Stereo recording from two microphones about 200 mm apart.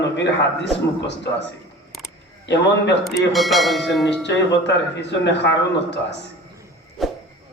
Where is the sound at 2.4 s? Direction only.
60° left (ahead or behind).